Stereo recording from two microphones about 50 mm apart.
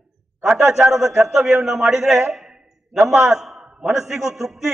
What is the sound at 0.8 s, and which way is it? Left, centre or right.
A man's voice, centre.